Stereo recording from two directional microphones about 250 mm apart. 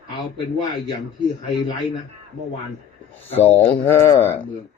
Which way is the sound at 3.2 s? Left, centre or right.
Centre.